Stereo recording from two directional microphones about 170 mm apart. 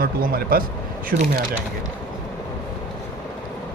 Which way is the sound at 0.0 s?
60° right (ahead or behind).